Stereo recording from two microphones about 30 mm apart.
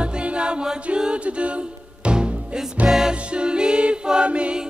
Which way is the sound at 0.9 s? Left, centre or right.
Right.